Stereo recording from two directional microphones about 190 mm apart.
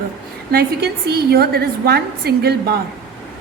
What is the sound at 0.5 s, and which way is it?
A woman's voice, 60° right (ahead or behind).